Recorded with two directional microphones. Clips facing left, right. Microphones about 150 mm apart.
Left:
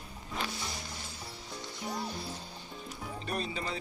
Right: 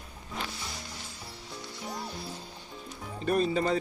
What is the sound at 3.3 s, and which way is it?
Speech, 40° right (ahead or behind).